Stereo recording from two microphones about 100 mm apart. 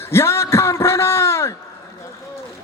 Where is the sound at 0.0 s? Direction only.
25° left (ahead or behind).